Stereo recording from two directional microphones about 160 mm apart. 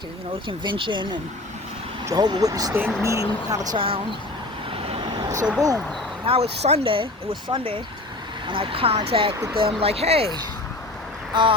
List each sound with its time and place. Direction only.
0.4 s speech: 30° right (ahead or behind)
4.7 s vehicle: 35° right (ahead or behind)
5.5 s speech: 20° right (ahead or behind)
6.2 s speech: 40° right (ahead or behind)